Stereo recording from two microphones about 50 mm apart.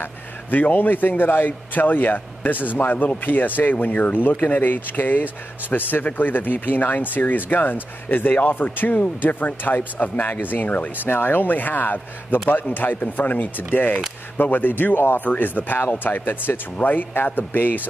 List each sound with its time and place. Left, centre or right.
0.5 s speech: left